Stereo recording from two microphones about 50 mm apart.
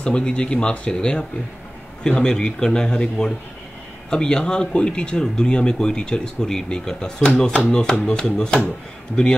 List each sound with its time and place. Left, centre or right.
0.0 s speech: left